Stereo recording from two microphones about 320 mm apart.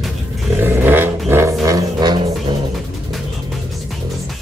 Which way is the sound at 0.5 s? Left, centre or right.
Centre.